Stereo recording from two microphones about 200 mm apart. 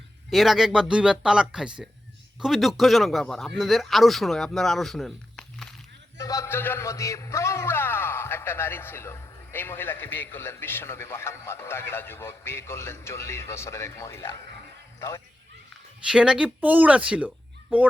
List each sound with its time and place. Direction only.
0.3 s speech: centre (ahead or behind)
6.1 s a man's voice: 15° left (ahead or behind)
16.0 s speech: 5° right (ahead or behind)